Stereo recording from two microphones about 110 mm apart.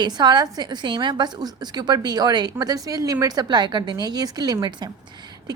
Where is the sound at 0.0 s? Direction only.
40° right (ahead or behind).